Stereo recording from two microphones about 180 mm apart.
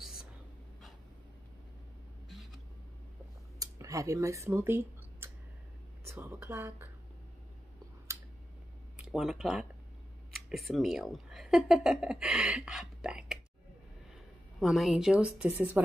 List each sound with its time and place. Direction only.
0.0 s whispering: centre (ahead or behind)
2.2 s vehicle: centre (ahead or behind)
3.5 s a sound: 20° right (ahead or behind)
8.9 s speech: 5° right (ahead or behind)
14.6 s a woman's voice: centre (ahead or behind)